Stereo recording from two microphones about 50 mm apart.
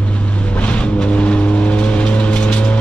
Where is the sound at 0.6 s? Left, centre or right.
Left.